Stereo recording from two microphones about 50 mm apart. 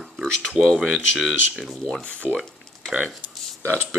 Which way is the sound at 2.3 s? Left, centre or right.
Centre.